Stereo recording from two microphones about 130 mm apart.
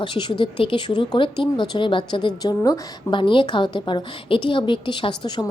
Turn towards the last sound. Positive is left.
turn(degrees=35)  # may be behind; listen again after turning